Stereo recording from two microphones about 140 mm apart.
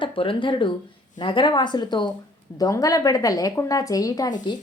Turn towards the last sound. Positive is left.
turn(degrees=30)  # may be behind; listen again after turning